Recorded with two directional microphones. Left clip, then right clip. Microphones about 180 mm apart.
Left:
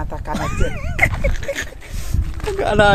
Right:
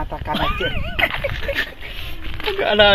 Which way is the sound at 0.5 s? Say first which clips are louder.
Left 1 dB; 20° left (ahead or behind).